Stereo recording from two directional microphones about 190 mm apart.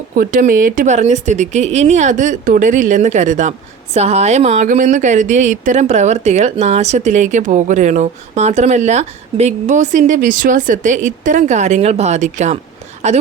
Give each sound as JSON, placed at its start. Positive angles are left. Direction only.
{"t": 0.2, "sound": "speech", "side_deg": -45}